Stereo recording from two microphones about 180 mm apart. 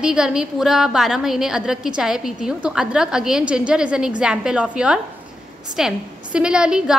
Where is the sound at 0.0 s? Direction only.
5° right (ahead or behind).